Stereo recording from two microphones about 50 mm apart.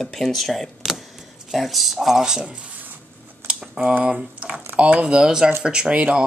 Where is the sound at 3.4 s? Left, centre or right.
Centre.